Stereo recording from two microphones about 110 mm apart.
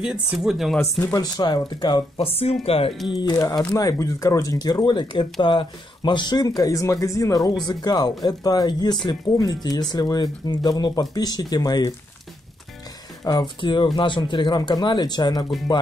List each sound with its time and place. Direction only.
0.0 s speech: 5° right (ahead or behind)
0.7 s speech: 25° left (ahead or behind); by 2.0 s 45° left (ahead or behind)
2.1 s speech: 65° left (ahead or behind)
3.5 s speech: 35° left (ahead or behind)
13.2 s speech: 40° left (ahead or behind)